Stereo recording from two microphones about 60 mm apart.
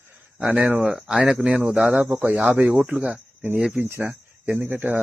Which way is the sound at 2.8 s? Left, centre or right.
Centre.